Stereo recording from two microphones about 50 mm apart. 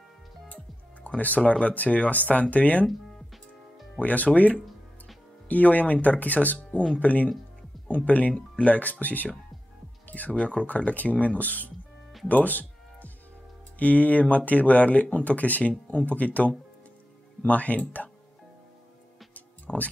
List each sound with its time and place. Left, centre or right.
1.0 s speech: left
4.0 s speech: left
5.5 s speech: left
10.0 s music: left
10.3 s speech: left
12.3 s music: left
13.7 s speech: left
19.3 s music: left